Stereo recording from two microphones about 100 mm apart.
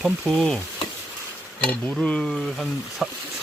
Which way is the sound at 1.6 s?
10° left (ahead or behind).